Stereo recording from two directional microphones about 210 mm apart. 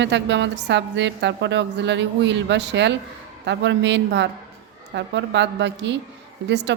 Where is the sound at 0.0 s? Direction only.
55° right (ahead or behind).